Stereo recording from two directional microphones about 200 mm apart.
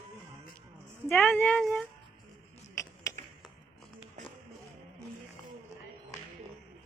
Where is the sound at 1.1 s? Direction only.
10° left (ahead or behind).